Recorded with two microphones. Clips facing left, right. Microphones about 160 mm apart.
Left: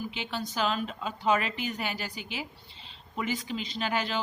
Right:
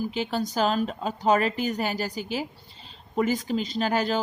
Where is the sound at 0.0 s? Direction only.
40° right (ahead or behind).